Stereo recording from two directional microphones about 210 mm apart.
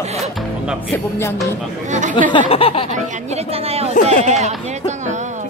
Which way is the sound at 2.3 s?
25° left (ahead or behind).